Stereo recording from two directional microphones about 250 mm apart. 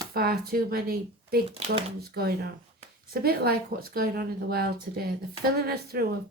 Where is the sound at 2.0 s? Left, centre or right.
Right.